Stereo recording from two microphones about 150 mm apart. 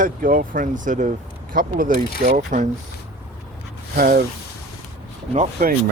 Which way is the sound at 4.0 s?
80° right.